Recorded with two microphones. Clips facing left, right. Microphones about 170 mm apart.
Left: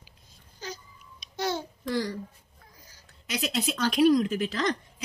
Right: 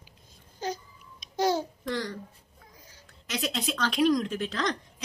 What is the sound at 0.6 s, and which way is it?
Babbling, 50° right (ahead or behind).